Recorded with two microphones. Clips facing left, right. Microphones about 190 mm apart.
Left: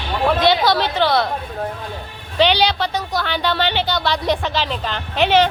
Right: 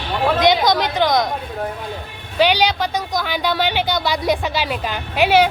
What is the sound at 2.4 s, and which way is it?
Speech, 10° right (ahead or behind).